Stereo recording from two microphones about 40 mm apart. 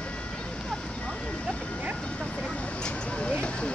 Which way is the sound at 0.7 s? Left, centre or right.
Centre.